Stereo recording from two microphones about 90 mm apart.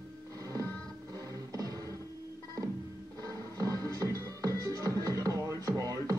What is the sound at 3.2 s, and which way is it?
Music, 40° right (ahead or behind).